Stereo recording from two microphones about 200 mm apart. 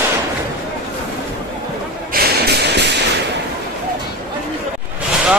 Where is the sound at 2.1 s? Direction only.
55° right (ahead or behind).